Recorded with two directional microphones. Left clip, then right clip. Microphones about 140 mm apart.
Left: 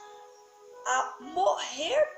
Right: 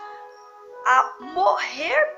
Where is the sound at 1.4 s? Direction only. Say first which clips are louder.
Right 7 dB; 15° left (ahead or behind).